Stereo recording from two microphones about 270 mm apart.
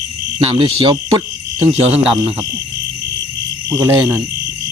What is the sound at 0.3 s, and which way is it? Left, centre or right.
Speech, centre.